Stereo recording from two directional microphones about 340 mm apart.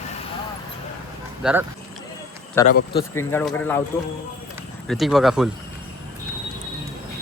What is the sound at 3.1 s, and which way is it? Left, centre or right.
Speech, centre.